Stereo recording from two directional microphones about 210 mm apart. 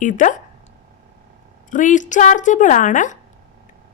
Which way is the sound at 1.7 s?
35° left (ahead or behind).